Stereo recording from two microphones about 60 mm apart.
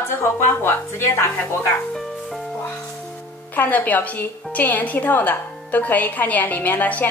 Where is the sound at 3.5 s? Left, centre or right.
Left.